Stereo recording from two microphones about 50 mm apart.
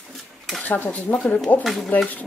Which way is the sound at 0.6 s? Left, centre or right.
Left.